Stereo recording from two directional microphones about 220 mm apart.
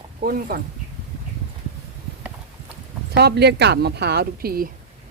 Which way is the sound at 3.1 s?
50° right (ahead or behind).